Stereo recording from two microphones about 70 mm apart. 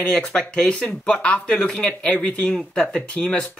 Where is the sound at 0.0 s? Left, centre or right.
Centre.